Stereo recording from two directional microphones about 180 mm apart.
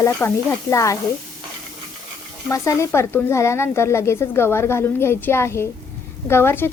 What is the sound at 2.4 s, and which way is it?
Speech, 15° left (ahead or behind).